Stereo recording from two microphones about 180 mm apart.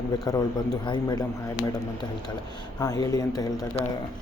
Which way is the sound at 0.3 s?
20° left (ahead or behind).